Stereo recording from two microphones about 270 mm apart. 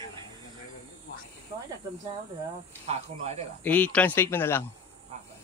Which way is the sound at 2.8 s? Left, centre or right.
Right.